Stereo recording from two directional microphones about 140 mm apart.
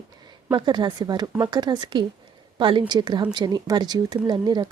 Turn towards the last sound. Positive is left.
turn(degrees=-30)  # may be behind; listen again after turning